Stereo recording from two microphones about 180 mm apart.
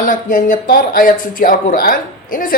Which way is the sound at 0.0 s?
50° left (ahead or behind).